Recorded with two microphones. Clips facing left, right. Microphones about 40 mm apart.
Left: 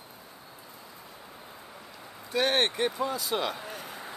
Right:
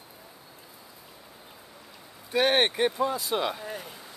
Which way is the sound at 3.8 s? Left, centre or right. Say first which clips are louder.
Left 4 dB; left.